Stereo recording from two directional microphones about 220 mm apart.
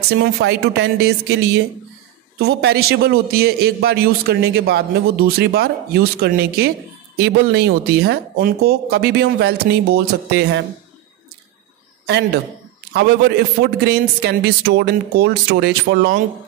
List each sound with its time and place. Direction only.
0.2 s a man's voice: 50° right (ahead or behind)
12.9 s a man's voice: 45° right (ahead or behind)